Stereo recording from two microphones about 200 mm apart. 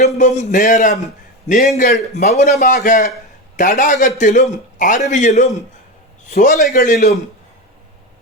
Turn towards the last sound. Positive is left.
turn(degrees=40)  # may be behind; listen again after turning